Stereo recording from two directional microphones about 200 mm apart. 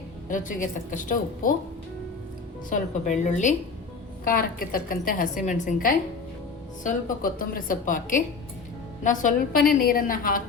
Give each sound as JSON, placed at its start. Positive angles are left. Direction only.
{"t": 0.3, "sound": "a woman's voice", "side_deg": 40}
{"t": 2.6, "sound": "a woman's voice", "side_deg": 40}